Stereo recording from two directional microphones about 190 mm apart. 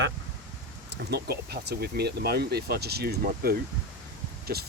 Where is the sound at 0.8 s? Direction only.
55° right (ahead or behind).